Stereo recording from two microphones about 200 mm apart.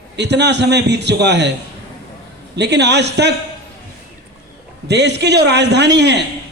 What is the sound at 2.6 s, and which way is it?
Speech, 60° right (ahead or behind).